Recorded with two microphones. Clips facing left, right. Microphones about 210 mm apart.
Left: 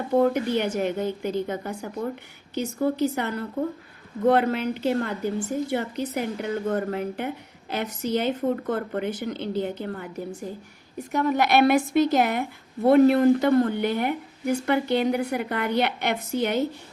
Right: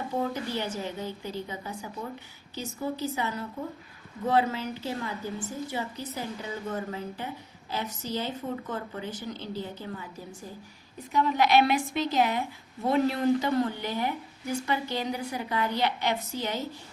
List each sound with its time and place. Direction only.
0.1 s a woman's voice: 60° left (ahead or behind)
3.0 s a woman's voice: 65° left (ahead or behind)